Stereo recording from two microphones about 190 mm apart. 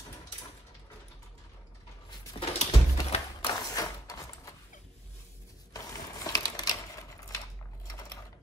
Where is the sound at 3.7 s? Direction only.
20° left (ahead or behind).